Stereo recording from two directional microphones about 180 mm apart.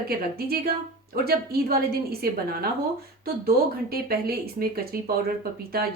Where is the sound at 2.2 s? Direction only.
55° right (ahead or behind).